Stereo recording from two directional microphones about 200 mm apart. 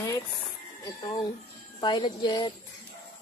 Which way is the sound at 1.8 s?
25° left (ahead or behind).